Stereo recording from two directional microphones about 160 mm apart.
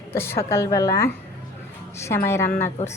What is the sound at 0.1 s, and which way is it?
A woman's voice, 15° left (ahead or behind).